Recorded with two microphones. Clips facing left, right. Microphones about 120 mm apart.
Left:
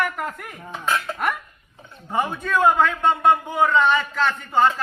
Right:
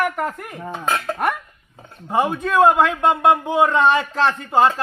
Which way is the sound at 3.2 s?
80° right.